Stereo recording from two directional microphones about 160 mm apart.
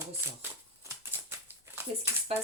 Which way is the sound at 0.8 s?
15° right (ahead or behind).